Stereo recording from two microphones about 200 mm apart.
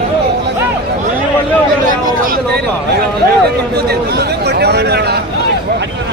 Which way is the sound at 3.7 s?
55° right (ahead or behind).